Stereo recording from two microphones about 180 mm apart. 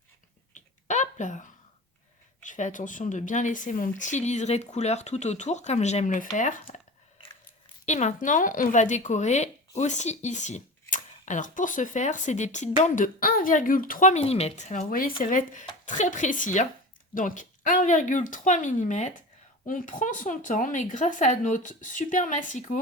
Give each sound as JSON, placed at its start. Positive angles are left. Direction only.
{"t": 0.5, "sound": "a sound", "side_deg": 40}
{"t": 2.5, "sound": "speech", "side_deg": 45}
{"t": 7.9, "sound": "speech", "side_deg": 40}